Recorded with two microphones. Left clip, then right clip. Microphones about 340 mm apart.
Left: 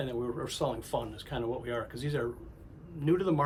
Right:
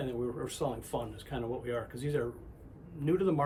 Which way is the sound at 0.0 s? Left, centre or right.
Centre.